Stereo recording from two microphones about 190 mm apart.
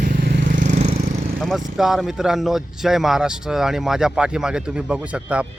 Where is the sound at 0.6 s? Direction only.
35° right (ahead or behind).